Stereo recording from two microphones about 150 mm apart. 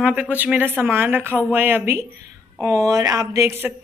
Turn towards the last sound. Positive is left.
turn(degrees=-15)  # may be behind; listen again after turning